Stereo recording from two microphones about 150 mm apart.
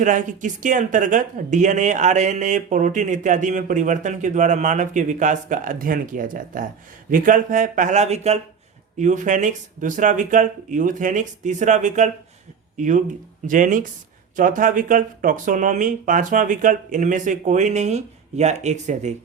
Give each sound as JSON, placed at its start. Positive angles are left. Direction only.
{"t": 0.0, "sound": "speech", "side_deg": -55}